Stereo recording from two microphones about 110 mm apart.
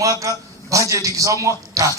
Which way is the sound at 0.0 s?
30° right (ahead or behind).